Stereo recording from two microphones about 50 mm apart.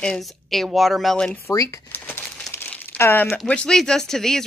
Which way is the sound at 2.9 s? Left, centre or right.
Left.